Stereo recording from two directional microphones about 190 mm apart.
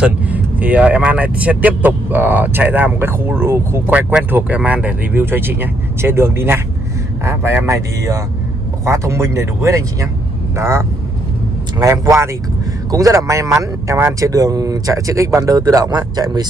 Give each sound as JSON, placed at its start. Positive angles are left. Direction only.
{"t": 0.0, "sound": "speech", "side_deg": -10}